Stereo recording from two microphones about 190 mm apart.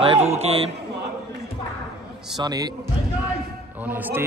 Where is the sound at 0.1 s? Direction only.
35° right (ahead or behind).